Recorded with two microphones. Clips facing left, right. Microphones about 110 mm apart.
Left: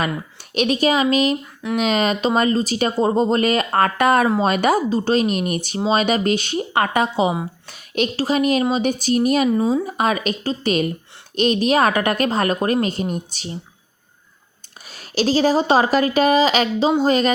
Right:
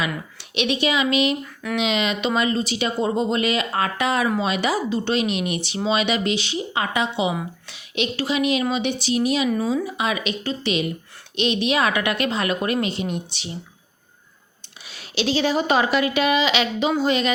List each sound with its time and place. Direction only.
0.3 s a woman's voice: 45° left (ahead or behind)
14.8 s a woman's voice: 45° left (ahead or behind)